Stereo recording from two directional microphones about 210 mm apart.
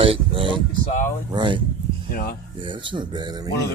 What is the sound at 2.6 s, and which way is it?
Speech, 25° right (ahead or behind).